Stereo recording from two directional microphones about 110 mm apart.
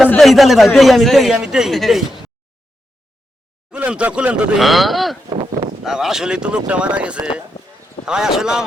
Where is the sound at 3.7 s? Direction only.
10° right (ahead or behind).